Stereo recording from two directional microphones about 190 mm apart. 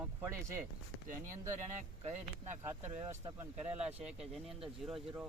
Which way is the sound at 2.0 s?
40° right (ahead or behind).